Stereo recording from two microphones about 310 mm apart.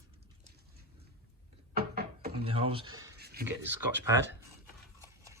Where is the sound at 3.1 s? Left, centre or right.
Right.